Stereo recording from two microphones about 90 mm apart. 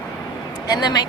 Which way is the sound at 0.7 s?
50° left (ahead or behind).